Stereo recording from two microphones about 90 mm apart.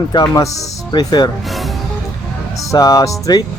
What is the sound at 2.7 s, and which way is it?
Speech, 40° left (ahead or behind).